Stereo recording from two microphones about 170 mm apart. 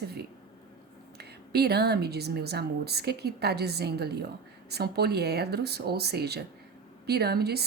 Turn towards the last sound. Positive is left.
turn(degrees=-70)  # may be behind; listen again after turning